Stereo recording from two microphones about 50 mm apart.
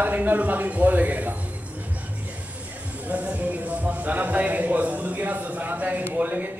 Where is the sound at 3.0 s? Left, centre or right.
Right.